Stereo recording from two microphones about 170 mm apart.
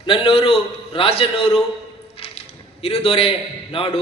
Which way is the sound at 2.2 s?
35° left (ahead or behind).